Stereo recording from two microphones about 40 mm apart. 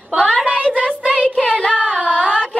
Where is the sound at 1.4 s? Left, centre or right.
Left.